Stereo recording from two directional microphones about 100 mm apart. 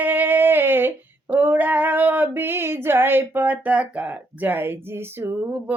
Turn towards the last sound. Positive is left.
turn(degrees=-20)  # may be behind; listen again after turning